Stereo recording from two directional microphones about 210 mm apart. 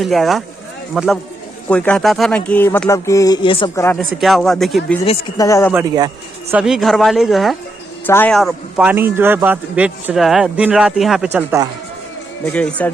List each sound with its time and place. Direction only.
0.0 s a man's voice: centre (ahead or behind); by 3.8 s 25° left (ahead or behind)
3.9 s a man's voice: centre (ahead or behind)
5.4 s speech: 15° left (ahead or behind)
5.7 s speech: 15° right (ahead or behind)
6.5 s a man's voice: 5° right (ahead or behind)
12.5 s speech: 5° left (ahead or behind)